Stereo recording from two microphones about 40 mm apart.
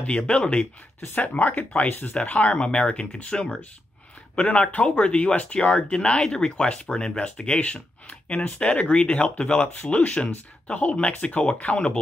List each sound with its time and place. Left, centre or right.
0.3 s speech: left
1.2 s speech: left
2.2 s speech: left